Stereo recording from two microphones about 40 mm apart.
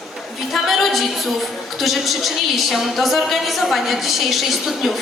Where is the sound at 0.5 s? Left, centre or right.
Centre.